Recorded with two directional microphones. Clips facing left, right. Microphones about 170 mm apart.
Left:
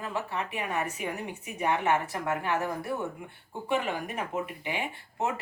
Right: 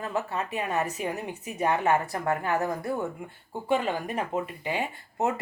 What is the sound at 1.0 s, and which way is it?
Speech, 35° right (ahead or behind).